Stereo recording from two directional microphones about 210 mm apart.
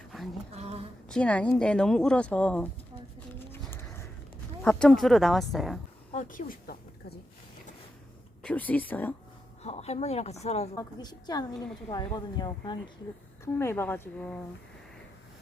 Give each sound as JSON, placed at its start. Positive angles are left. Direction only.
{"t": 0.5, "sound": "insect", "side_deg": -30}
{"t": 1.0, "sound": "speech", "side_deg": 5}
{"t": 3.3, "sound": "pigeon", "side_deg": 10}
{"t": 4.6, "sound": "speech", "side_deg": 5}
{"t": 6.1, "sound": "speech", "side_deg": 40}
{"t": 8.4, "sound": "a woman's voice", "side_deg": 5}
{"t": 9.6, "sound": "a woman's voice", "side_deg": 30}
{"t": 10.8, "sound": "a woman's voice", "side_deg": 20}